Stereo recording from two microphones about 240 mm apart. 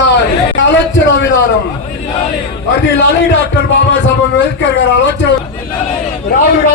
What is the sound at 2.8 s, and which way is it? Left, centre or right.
A man's voice, left.